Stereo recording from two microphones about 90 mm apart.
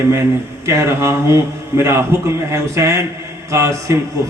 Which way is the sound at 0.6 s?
30° right (ahead or behind).